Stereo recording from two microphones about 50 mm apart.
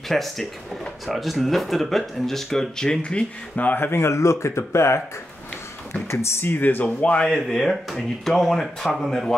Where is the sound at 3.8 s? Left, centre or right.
Left.